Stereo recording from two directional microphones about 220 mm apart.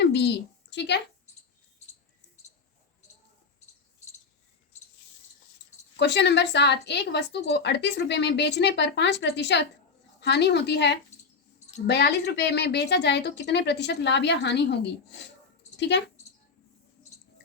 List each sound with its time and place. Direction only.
0.0 s a sound: 50° left (ahead or behind)
0.7 s a woman's voice: 50° left (ahead or behind)
6.0 s speech: 50° left (ahead or behind)
15.8 s speech: 50° left (ahead or behind)